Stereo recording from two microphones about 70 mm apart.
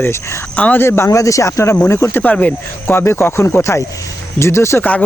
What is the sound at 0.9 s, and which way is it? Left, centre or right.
Speech, left.